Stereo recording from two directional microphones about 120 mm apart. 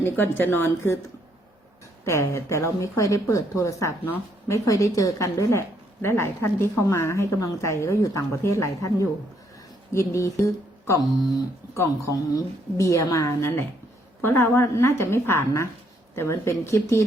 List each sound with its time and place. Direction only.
0.0 s a woman's voice: 20° left (ahead or behind)
2.0 s a woman's voice: 25° left (ahead or behind)